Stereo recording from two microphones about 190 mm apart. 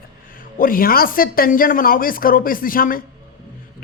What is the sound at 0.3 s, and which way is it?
Speech, 50° left (ahead or behind).